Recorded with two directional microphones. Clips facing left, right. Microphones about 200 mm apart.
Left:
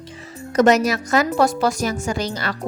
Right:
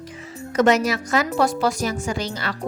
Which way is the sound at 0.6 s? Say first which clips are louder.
Left 2 dB; 40° left (ahead or behind).